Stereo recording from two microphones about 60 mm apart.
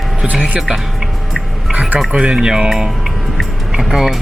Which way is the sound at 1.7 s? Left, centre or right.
Right.